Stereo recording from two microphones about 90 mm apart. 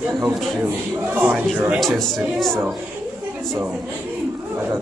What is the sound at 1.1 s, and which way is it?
Speech, 20° right (ahead or behind).